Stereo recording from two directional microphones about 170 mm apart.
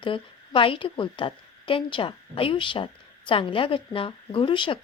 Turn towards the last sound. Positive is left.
turn(degrees=30)  # may be behind; listen again after turning